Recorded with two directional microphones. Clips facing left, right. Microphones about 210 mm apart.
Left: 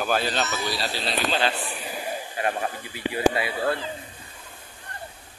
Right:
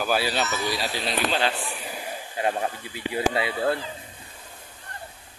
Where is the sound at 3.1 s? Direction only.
25° right (ahead or behind).